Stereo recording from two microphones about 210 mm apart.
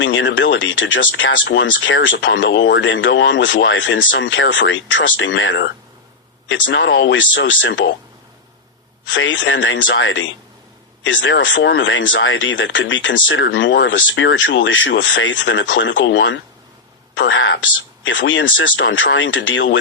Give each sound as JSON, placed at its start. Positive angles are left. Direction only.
{"t": 0.0, "sound": "speech", "side_deg": 60}
{"t": 9.0, "sound": "speech", "side_deg": 60}